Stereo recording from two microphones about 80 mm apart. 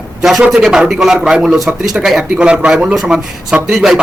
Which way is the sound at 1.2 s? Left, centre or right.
Centre.